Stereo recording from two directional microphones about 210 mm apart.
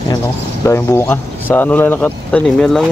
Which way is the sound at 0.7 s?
10° left (ahead or behind).